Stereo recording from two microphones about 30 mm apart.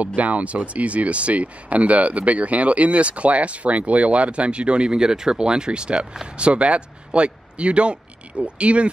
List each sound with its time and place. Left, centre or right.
0.0 s speech: right
4.9 s speech: right